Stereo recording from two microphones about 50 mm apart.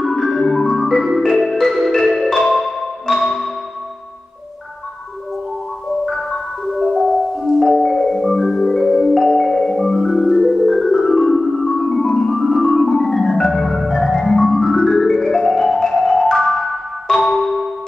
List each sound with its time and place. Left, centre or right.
0.1 s marimba: centre
6.0 s marimba: centre
7.4 s music: centre